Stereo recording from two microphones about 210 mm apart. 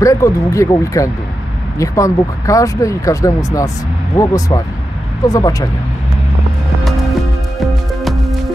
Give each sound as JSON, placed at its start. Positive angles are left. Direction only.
{"t": 0.0, "sound": "speech", "side_deg": 15}
{"t": 8.0, "sound": "music", "side_deg": 0}